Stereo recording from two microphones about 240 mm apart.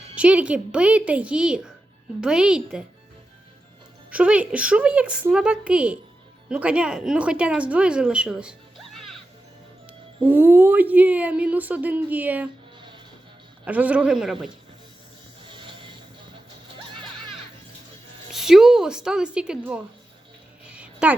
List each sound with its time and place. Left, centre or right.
0.2 s speech: centre
4.1 s speech: centre
10.2 s speech: centre
13.7 s speech: centre
15.4 s music: right
18.3 s speech: centre
20.7 s a sound: centre